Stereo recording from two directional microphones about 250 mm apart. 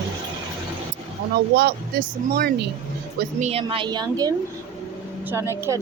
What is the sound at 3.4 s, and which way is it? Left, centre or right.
Speech, right.